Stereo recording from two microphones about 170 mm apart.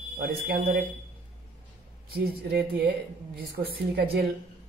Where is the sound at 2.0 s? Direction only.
65° right (ahead or behind).